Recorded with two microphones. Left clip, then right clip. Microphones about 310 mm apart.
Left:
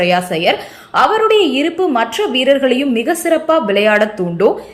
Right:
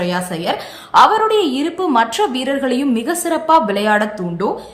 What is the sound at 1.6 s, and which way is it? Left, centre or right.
Speech, centre.